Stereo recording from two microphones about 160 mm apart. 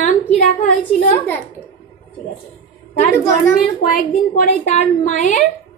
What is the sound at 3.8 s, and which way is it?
A woman's voice, 60° left (ahead or behind).